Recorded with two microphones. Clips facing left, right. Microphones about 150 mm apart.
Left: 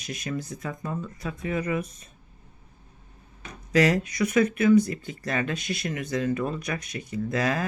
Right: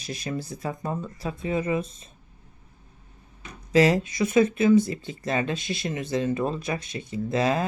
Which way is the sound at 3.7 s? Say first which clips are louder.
Right 2 dB; 25° right (ahead or behind).